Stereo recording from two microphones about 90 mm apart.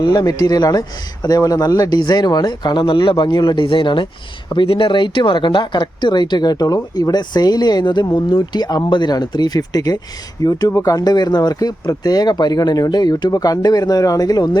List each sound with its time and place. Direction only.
0.0 s speech: 50° left (ahead or behind)
4.5 s speech: 75° left (ahead or behind); by 14.6 s 50° left (ahead or behind)